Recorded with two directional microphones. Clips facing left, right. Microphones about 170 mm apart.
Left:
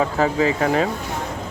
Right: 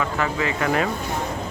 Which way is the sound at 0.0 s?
35° left (ahead or behind).